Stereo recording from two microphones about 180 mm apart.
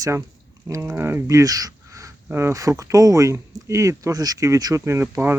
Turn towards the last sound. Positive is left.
turn(degrees=-15)  # may be behind; listen again after turning